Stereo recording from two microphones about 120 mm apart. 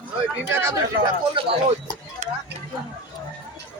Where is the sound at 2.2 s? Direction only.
75° right (ahead or behind).